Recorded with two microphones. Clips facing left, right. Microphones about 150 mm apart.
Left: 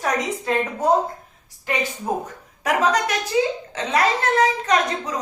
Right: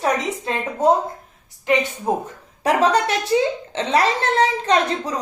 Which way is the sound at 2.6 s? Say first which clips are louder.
Right 3 dB; 30° right (ahead or behind).